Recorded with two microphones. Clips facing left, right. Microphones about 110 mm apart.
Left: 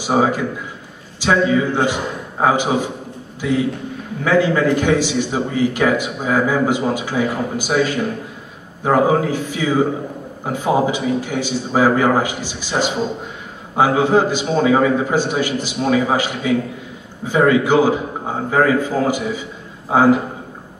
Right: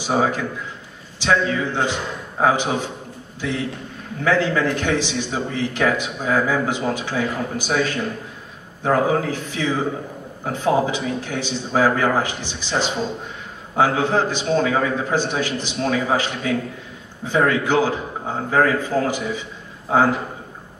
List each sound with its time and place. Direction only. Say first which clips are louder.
0.0 s a man's voice: left 3 dB; 5° left (ahead or behind)